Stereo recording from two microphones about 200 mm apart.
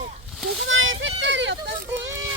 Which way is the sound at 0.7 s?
75° right (ahead or behind).